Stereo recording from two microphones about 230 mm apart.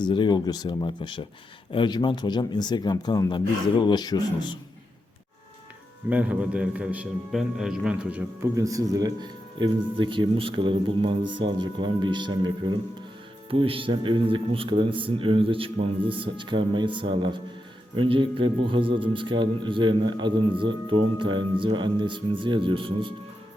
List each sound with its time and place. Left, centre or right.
0.0 s speech: centre
6.1 s a man's voice: centre
13.5 s a man's voice: right